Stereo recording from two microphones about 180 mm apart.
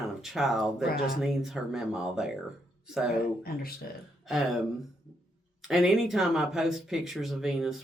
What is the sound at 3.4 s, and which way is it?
Speech, 55° left (ahead or behind).